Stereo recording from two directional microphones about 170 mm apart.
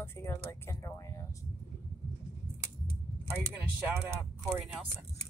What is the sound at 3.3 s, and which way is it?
Speech, 10° right (ahead or behind).